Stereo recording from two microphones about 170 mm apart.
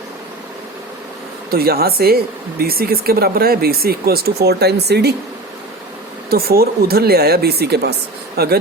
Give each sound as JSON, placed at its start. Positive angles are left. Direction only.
{"t": 1.5, "sound": "speech", "side_deg": -65}
{"t": 6.3, "sound": "speech", "side_deg": -65}